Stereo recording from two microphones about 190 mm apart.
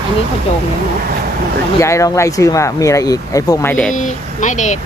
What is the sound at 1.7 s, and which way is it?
Speech, 15° left (ahead or behind).